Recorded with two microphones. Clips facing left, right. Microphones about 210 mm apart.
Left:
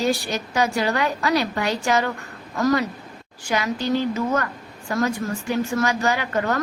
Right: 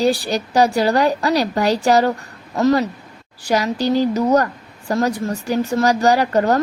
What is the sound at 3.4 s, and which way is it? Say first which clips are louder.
A woman's voice: right 5 dB; 35° right (ahead or behind).